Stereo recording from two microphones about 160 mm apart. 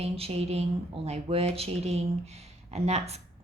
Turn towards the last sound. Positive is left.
turn(degrees=-40)  # may be behind; listen again after turning